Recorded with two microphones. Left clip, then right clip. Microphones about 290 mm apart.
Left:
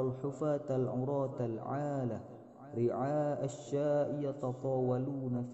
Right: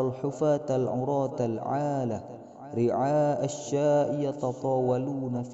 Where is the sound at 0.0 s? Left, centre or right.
Right.